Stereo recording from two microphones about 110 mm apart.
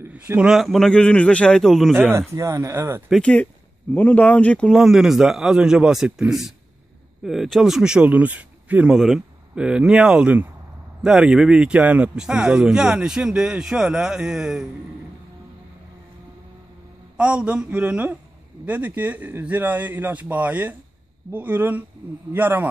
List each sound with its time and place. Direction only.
0.0 s a sound: 20° right (ahead or behind)
0.4 s a man's voice: 5° right (ahead or behind)
2.1 s speech: 30° right (ahead or behind)
3.1 s speech: 10° left (ahead or behind)
4.7 s a man's voice: 5° right (ahead or behind)
8.9 s speech: centre (ahead or behind)
17.2 s speech: 10° right (ahead or behind)